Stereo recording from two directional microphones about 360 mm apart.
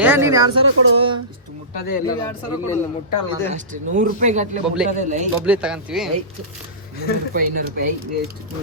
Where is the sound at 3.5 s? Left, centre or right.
Right.